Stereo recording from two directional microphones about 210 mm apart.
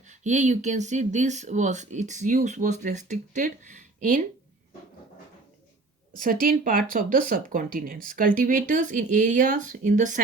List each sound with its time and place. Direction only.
0.1 s speech: 35° right (ahead or behind)
6.4 s speech: 40° right (ahead or behind)